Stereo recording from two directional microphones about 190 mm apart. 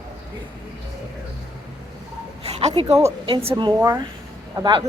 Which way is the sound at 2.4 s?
35° right (ahead or behind).